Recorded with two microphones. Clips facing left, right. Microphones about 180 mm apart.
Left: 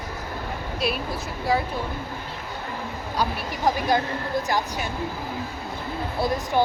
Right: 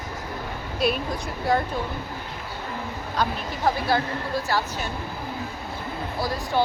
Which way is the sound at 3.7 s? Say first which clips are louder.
Left 1 dB; 15° left (ahead or behind).